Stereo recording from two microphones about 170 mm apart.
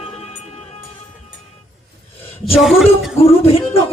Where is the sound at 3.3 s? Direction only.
35° left (ahead or behind).